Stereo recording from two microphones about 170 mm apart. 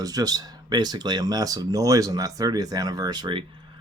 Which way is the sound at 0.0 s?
20° right (ahead or behind).